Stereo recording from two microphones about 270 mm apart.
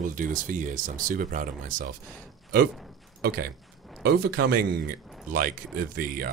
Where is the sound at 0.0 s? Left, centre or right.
Right.